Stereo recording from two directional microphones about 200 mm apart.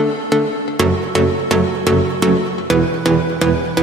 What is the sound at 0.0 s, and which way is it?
Music, centre (ahead or behind).